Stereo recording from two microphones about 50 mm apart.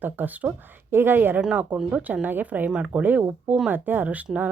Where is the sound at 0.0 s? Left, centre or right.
Right.